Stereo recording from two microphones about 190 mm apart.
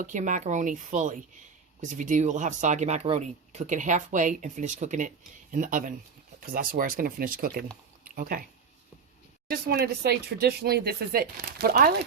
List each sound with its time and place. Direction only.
0.0 s speech: 40° right (ahead or behind)
9.5 s speech: 55° right (ahead or behind)